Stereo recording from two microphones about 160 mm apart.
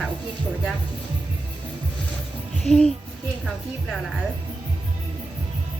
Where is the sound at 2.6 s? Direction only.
5° left (ahead or behind).